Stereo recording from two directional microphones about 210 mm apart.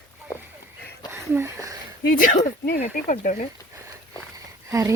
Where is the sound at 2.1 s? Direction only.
40° left (ahead or behind).